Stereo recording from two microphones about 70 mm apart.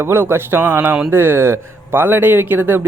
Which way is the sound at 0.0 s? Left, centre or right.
Right.